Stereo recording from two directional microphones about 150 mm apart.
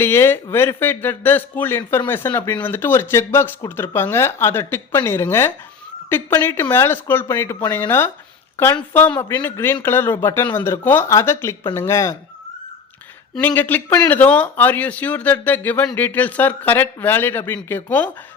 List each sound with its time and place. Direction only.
0.0 s speech: 15° left (ahead or behind)
13.3 s speech: 10° left (ahead or behind)